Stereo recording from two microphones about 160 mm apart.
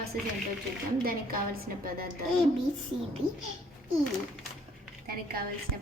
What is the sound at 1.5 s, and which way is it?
Speech, 70° right (ahead or behind).